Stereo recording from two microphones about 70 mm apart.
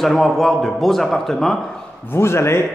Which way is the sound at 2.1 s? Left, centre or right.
Left.